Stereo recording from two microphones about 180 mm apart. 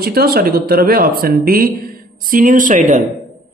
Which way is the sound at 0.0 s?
60° right (ahead or behind).